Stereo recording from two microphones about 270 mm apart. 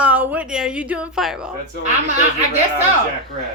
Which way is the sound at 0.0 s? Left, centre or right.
Centre.